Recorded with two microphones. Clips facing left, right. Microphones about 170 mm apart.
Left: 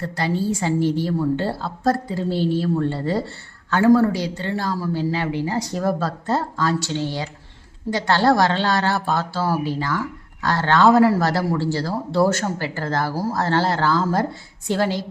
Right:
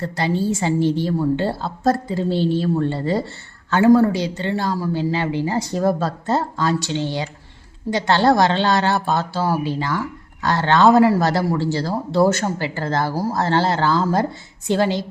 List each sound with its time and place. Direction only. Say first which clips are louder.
0.2 s speech: right 2 dB; 25° right (ahead or behind)